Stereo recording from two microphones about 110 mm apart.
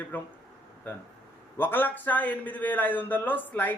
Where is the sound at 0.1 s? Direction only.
15° left (ahead or behind).